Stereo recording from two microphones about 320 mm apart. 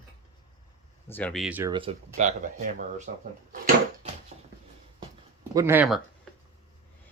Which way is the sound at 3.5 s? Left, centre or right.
Right.